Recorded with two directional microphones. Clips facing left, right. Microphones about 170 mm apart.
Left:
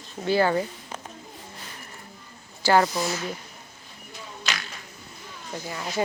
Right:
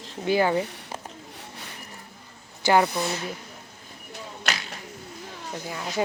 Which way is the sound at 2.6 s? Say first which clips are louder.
Even; 20° right (ahead or behind).